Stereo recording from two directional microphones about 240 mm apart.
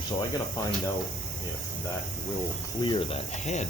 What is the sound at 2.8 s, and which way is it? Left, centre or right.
Speech, left.